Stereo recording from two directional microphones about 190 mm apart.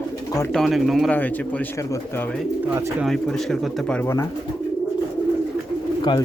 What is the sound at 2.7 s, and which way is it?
Speech, 15° right (ahead or behind).